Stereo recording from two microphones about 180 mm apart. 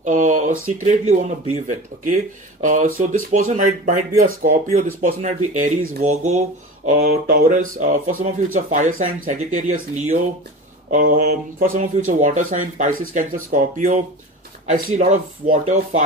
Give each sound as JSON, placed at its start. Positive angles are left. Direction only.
{"t": 0.0, "sound": "speech", "side_deg": -45}
{"t": 6.9, "sound": "speech", "side_deg": -55}
{"t": 7.8, "sound": "speech", "side_deg": -45}